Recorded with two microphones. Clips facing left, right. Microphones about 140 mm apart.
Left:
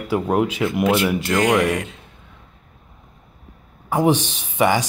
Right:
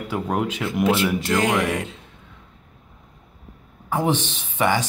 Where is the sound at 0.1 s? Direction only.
5° left (ahead or behind).